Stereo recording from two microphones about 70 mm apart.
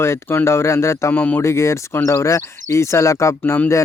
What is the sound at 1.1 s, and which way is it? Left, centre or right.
Speech, left.